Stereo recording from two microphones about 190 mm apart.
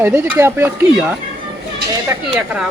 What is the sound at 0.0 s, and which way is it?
Speech, 10° right (ahead or behind).